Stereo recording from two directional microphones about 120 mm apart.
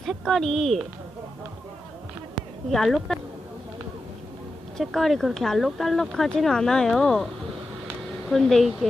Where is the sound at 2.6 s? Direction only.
Centre (ahead or behind).